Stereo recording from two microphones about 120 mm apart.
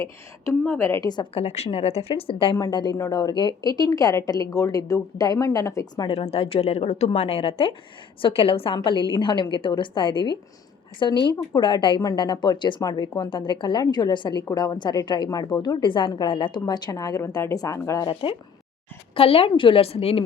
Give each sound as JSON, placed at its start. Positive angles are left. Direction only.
{"t": 0.6, "sound": "a woman's voice", "side_deg": 15}
{"t": 1.0, "sound": "a woman's voice", "side_deg": 35}
{"t": 1.3, "sound": "a woman's voice", "side_deg": 60}
{"t": 2.6, "sound": "a woman's voice", "side_deg": 35}
{"t": 6.1, "sound": "a woman's voice", "side_deg": 60}
{"t": 18.1, "sound": "a woman's voice", "side_deg": 40}
{"t": 19.1, "sound": "a woman's voice", "side_deg": 55}